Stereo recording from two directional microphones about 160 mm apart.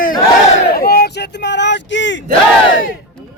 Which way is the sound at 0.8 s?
75° left (ahead or behind).